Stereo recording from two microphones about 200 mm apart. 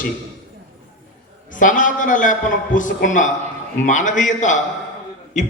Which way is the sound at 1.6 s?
40° left (ahead or behind).